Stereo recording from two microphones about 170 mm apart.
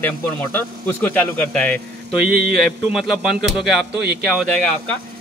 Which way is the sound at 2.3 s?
60° right (ahead or behind).